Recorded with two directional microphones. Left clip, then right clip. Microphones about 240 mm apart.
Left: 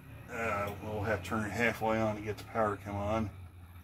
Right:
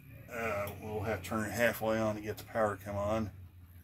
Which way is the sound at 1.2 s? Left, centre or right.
Right.